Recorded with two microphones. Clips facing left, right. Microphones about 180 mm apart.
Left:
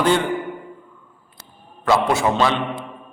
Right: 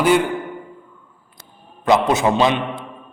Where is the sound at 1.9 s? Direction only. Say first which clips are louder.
Right 2 dB; 20° right (ahead or behind).